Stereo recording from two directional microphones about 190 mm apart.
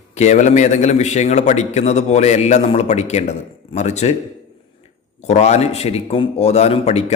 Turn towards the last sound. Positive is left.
turn(degrees=35)  # may be behind; listen again after turning